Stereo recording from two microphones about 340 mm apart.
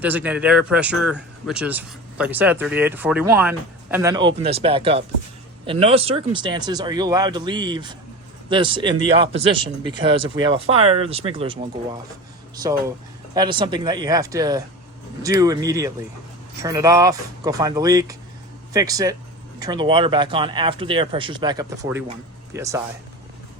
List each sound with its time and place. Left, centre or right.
0.0 s speech: centre
13.3 s speech: centre